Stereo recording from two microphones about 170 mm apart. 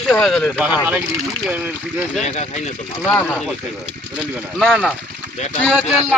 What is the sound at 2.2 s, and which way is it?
Speech, 40° left (ahead or behind).